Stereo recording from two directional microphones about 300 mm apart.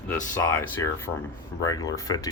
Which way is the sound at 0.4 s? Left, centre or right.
Centre.